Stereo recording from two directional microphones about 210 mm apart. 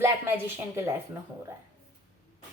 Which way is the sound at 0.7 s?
10° right (ahead or behind).